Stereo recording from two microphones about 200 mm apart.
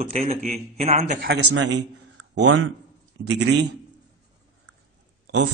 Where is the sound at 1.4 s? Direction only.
70° right (ahead or behind).